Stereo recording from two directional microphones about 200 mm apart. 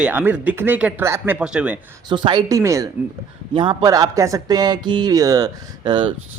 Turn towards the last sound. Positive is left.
turn(degrees=-20)  # may be behind; listen again after turning